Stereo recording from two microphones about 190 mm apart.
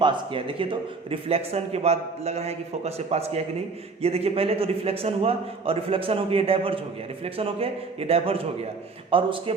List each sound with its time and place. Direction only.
0.0 s a man's voice: 25° right (ahead or behind)